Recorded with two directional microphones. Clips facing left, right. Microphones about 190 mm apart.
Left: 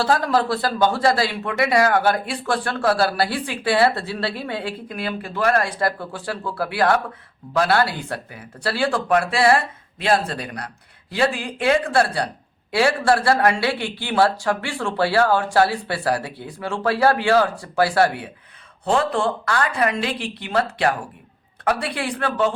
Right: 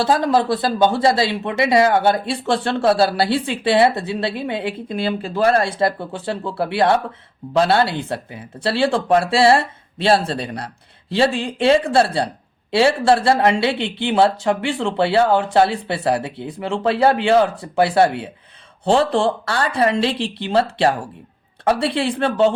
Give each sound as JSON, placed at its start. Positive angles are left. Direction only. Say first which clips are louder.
{"t": 0.0, "sound": "speech", "louder": "right 3 dB", "side_deg": -20}